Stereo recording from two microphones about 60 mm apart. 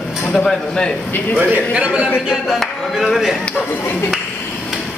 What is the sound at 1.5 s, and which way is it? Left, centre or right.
Speech, right.